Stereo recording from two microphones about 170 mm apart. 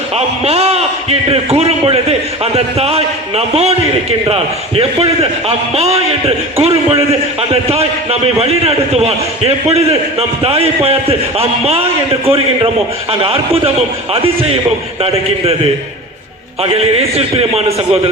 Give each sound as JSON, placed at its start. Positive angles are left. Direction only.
{"t": 0.4, "sound": "a man's voice", "side_deg": -35}
{"t": 16.7, "sound": "a man's voice", "side_deg": -35}